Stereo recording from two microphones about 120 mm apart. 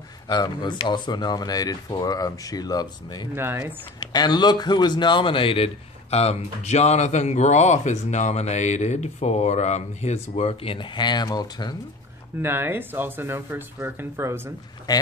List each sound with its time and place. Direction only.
0.3 s speech: 40° left (ahead or behind)
3.3 s speech: 20° right (ahead or behind)
4.0 s speech: 35° left (ahead or behind)
12.4 s speech: 20° right (ahead or behind)
14.9 s speech: 30° left (ahead or behind)